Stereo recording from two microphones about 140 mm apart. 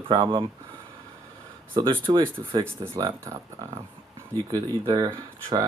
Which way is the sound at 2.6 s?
15° right (ahead or behind).